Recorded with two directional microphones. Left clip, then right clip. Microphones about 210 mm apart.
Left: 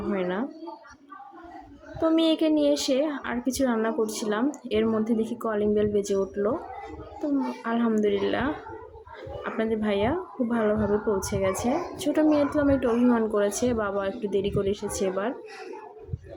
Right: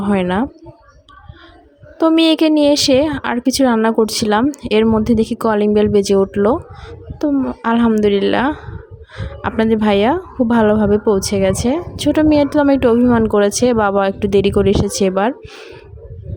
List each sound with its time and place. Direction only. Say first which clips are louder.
0.1 s a woman's voice: right 11 dB; 50° right (ahead or behind)
2.0 s a woman's voice: right 10 dB; 50° right (ahead or behind)